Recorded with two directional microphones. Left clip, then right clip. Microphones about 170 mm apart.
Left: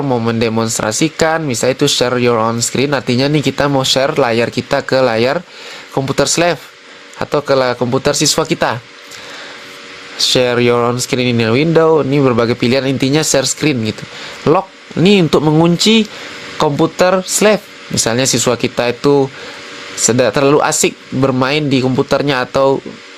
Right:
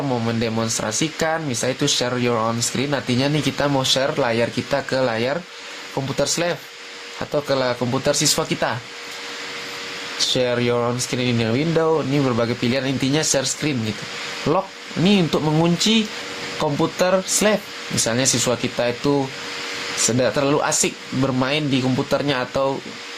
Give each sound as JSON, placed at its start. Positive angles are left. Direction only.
{"t": 0.1, "sound": "speech", "side_deg": 50}
{"t": 10.2, "sound": "speech", "side_deg": 55}